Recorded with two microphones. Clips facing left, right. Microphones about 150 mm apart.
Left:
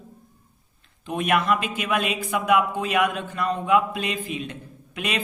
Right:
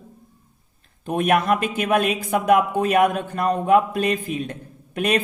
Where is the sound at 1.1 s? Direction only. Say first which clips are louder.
Right 3 dB; 45° right (ahead or behind).